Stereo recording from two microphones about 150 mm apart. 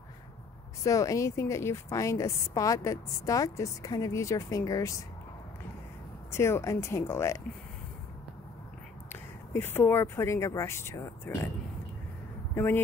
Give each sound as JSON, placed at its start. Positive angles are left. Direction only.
{"t": 0.8, "sound": "a woman's voice", "side_deg": 20}
{"t": 6.3, "sound": "speech", "side_deg": 15}
{"t": 9.1, "sound": "speech", "side_deg": 15}
{"t": 12.5, "sound": "speech", "side_deg": 15}